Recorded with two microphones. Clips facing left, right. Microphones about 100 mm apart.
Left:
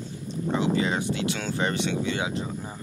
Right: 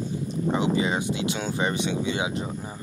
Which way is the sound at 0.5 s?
15° right (ahead or behind).